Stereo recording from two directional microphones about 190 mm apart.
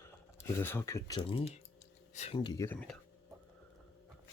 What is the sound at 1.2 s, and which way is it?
Speech, 30° left (ahead or behind).